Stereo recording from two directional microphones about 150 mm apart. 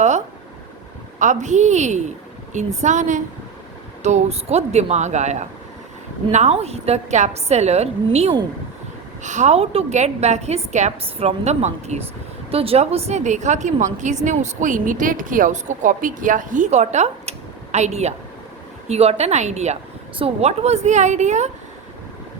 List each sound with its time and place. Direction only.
1.2 s a woman's voice: 55° right (ahead or behind)
9.2 s a woman's voice: 55° right (ahead or behind)